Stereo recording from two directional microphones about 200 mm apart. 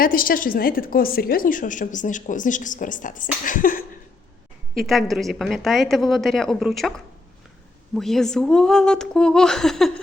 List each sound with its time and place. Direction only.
0.0 s a woman's voice: 45° left (ahead or behind)
4.8 s a woman's voice: centre (ahead or behind)
7.9 s a woman's voice: centre (ahead or behind)